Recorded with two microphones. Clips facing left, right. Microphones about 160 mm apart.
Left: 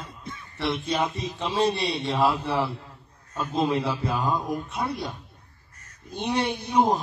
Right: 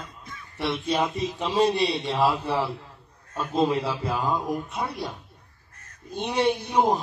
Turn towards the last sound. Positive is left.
turn(degrees=0)  # may be behind; listen again after turning